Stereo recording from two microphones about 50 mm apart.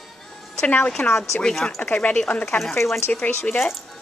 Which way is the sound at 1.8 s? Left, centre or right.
Left.